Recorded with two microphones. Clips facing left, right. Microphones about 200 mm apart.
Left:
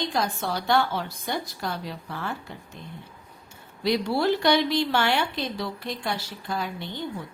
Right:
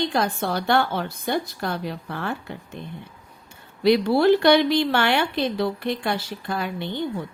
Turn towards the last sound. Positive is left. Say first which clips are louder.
# right 4 dB
turn(degrees=-60)  # may be behind; listen again after turning